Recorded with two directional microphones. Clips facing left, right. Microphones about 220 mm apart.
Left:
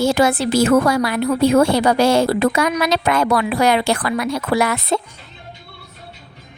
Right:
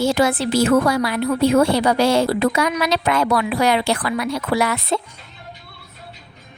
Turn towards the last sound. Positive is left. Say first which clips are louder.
# left 2 dB
turn(degrees=45)  # may be behind; listen again after turning